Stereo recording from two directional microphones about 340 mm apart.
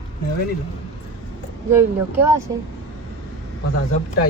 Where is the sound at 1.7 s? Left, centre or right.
Centre.